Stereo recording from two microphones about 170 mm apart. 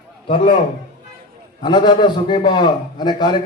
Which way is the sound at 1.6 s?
25° left (ahead or behind).